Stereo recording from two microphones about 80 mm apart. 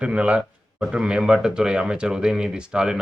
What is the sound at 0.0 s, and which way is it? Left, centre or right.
Speech, centre.